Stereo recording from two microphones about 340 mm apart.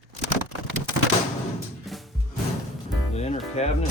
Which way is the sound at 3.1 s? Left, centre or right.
Centre.